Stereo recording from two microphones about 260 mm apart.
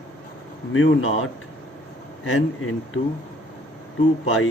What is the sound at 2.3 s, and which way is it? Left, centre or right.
Speech, left.